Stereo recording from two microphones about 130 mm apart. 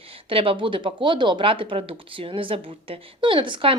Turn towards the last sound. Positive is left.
turn(degrees=-40)  # may be behind; listen again after turning